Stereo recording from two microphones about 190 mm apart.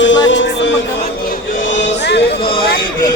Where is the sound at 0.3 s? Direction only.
75° left (ahead or behind).